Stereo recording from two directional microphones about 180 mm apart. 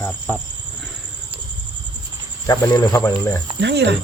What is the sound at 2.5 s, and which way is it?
Speech, 15° left (ahead or behind).